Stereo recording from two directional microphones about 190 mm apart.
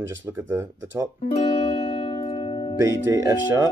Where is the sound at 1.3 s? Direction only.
35° left (ahead or behind).